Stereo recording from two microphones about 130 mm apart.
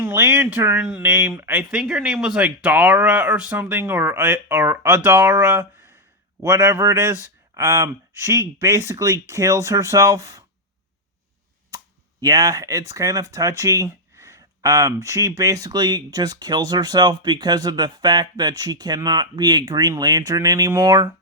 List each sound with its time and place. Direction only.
0.0 s speech: 20° right (ahead or behind)
12.2 s speech: 30° right (ahead or behind)